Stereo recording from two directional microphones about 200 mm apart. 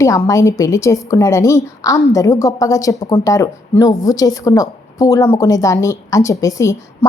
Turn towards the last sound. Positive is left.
turn(degrees=15)  # may be behind; listen again after turning